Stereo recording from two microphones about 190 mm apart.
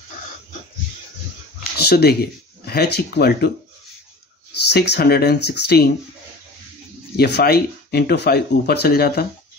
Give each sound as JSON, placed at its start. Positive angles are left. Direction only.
{"t": 1.8, "sound": "speech", "side_deg": 55}
{"t": 4.6, "sound": "speech", "side_deg": 60}
{"t": 7.2, "sound": "speech", "side_deg": 60}